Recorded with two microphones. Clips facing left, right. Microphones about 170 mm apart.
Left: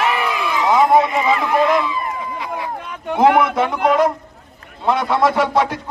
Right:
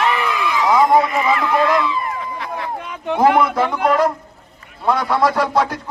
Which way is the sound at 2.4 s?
15° left (ahead or behind).